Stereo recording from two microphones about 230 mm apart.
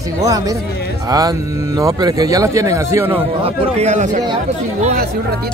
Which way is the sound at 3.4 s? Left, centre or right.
Right.